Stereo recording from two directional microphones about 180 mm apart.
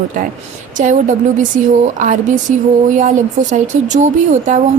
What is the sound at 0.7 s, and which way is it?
A woman's voice, 45° right (ahead or behind).